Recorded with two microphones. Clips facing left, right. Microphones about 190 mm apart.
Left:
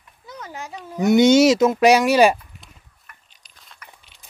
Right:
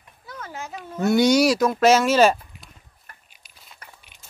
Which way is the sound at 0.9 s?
20° left (ahead or behind).